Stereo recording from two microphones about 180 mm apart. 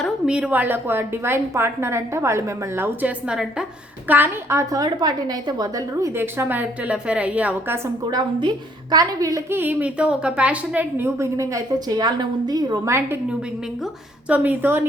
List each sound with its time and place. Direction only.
0.0 s a woman's voice: 5° right (ahead or behind)
8.0 s a woman's voice: 25° right (ahead or behind)
14.3 s a woman's voice: 10° right (ahead or behind)